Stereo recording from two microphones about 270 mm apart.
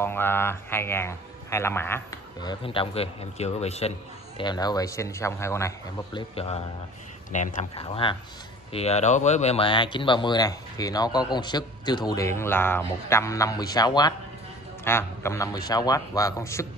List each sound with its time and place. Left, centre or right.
0.0 s speech: centre
2.6 s speech: centre
6.1 s speech: left